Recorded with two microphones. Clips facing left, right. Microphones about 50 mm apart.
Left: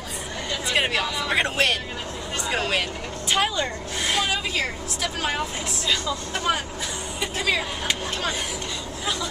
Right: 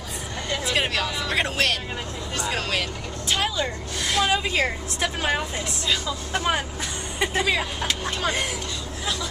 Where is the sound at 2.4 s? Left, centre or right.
Centre.